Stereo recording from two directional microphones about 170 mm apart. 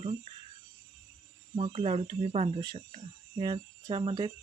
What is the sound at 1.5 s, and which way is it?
Speech, 35° right (ahead or behind).